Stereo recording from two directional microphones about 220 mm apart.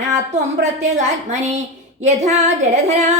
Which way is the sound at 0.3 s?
30° right (ahead or behind).